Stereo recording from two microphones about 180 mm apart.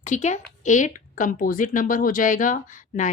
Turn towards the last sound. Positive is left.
turn(degrees=45)  # may be behind; listen again after turning